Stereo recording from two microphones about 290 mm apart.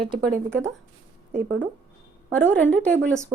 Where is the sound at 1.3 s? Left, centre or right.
Right.